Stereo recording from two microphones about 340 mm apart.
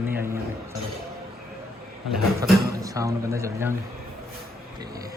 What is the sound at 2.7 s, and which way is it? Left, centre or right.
A man's voice, centre.